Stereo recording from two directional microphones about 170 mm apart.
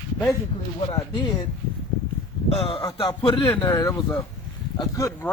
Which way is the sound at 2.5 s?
35° left (ahead or behind).